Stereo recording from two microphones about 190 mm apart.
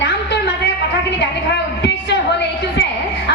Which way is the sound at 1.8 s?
65° left (ahead or behind).